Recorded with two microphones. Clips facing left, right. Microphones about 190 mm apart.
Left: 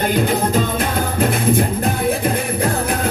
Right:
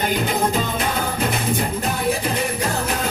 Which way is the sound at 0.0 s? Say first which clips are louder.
Left 3 dB; 55° left (ahead or behind).